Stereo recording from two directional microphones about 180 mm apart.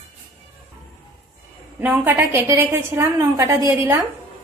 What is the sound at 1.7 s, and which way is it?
A woman's voice, 10° right (ahead or behind).